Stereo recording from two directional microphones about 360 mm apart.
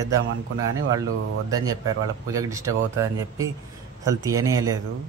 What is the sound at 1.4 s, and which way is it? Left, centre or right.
Speech, centre.